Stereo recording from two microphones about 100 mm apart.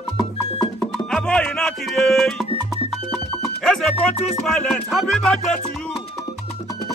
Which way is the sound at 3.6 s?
5° left (ahead or behind).